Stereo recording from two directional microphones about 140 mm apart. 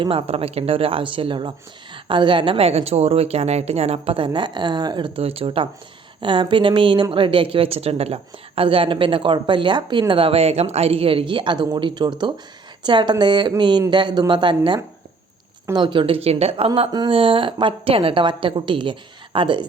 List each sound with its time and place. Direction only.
0.0 s a woman's voice: 40° right (ahead or behind)